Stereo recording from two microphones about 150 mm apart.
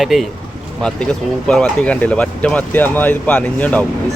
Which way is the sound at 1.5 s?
5° left (ahead or behind).